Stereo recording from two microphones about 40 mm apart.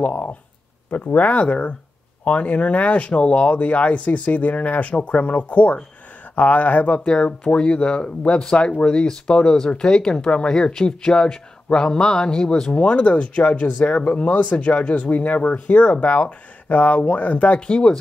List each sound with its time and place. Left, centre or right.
0.0 s speech: left
7.1 s speech: left
17.6 s speech: left